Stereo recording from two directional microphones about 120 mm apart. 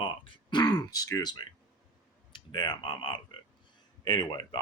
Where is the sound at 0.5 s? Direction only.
35° left (ahead or behind).